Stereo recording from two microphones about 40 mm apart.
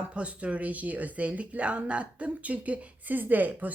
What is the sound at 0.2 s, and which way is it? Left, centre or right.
Speech, right.